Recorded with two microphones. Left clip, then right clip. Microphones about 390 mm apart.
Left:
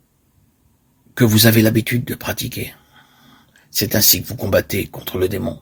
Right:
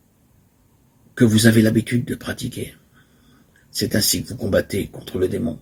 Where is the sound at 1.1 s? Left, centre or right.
Left.